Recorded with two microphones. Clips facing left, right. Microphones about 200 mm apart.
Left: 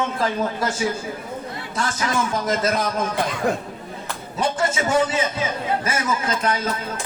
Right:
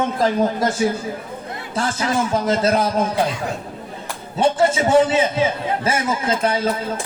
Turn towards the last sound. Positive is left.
turn(degrees=-30)  # may be behind; listen again after turning